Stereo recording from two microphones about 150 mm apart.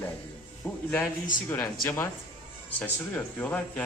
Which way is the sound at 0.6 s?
5° left (ahead or behind).